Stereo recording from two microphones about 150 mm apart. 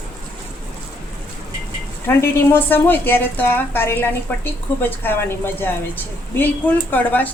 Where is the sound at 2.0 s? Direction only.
15° left (ahead or behind).